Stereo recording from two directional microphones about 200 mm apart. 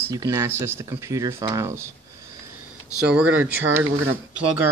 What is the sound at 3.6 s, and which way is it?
Speech, 90° right.